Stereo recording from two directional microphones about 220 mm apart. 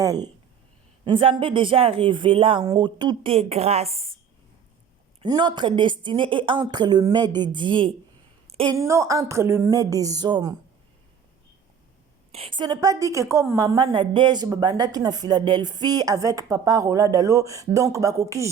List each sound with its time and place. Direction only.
0.0 s speech: 15° right (ahead or behind)
5.2 s a woman's voice: 20° right (ahead or behind)
12.3 s a woman's voice: 25° right (ahead or behind)